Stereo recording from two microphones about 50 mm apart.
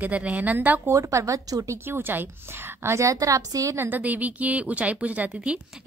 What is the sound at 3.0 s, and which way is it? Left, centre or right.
Speech, right.